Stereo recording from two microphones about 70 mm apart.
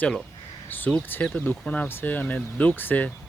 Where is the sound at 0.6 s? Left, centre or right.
Left.